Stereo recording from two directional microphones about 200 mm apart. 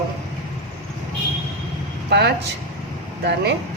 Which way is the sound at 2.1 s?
55° right (ahead or behind).